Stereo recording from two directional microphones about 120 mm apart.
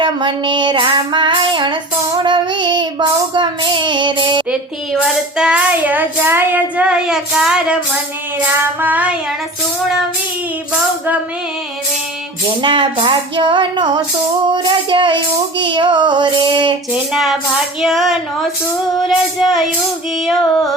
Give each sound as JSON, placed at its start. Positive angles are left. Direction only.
{"t": 0.0, "sound": "child singing", "side_deg": -40}
{"t": 4.9, "sound": "child singing", "side_deg": 0}
{"t": 12.6, "sound": "child singing", "side_deg": -45}
{"t": 16.9, "sound": "speech", "side_deg": -5}